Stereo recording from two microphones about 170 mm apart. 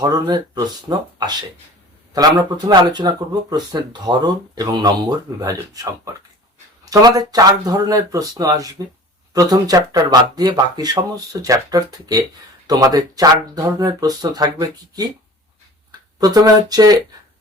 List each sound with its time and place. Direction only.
0.0 s speech: 20° right (ahead or behind)
6.9 s speech: 20° right (ahead or behind)